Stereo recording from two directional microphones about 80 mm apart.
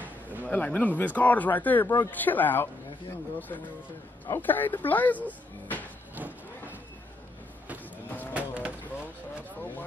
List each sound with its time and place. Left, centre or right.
0.0 s a sound: right
0.5 s speech: centre
8.3 s vehicle: centre